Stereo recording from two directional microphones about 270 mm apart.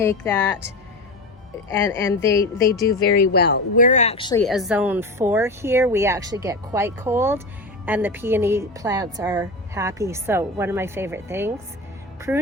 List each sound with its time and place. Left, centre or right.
0.0 s speech: centre
1.7 s speech: centre
3.3 s speech: left; by 4.4 s centre
4.4 s a woman's voice: centre